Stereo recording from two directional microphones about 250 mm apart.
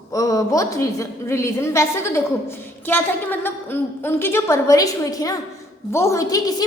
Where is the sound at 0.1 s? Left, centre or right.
Centre.